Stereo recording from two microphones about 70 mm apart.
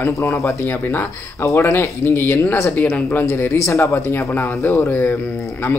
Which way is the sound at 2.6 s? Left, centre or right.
Left.